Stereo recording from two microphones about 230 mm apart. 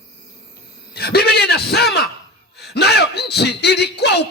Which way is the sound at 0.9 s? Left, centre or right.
Left.